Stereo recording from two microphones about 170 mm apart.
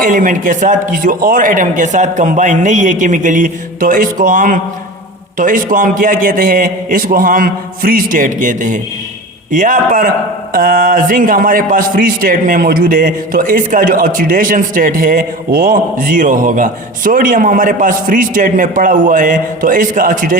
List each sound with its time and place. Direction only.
0.0 s a man's voice: 50° right (ahead or behind)